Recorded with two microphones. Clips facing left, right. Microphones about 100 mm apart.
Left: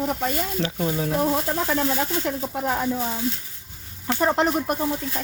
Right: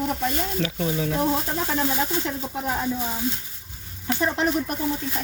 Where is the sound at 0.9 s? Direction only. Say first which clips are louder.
Left 2 dB; 30° left (ahead or behind).